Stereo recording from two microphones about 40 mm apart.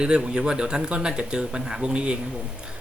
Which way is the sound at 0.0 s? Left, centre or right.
Right.